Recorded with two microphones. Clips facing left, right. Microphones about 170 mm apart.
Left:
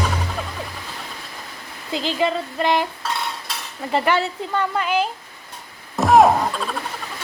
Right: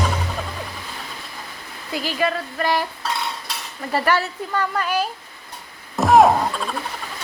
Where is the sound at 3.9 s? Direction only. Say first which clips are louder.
Left 1 dB; 20° left (ahead or behind).